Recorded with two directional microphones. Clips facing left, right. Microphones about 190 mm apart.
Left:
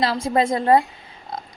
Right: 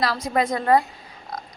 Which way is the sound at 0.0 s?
25° left (ahead or behind).